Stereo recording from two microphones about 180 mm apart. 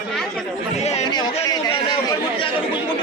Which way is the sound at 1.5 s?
25° left (ahead or behind).